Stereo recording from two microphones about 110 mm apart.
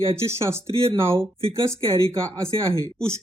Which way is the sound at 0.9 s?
50° right (ahead or behind).